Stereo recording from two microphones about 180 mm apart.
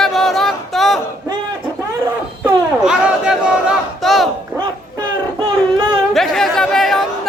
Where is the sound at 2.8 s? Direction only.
5° right (ahead or behind).